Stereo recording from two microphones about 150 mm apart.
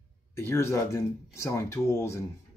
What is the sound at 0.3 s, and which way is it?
Speech, 15° left (ahead or behind).